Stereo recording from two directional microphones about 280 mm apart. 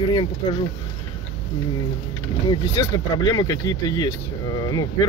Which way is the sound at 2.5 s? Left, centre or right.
Centre.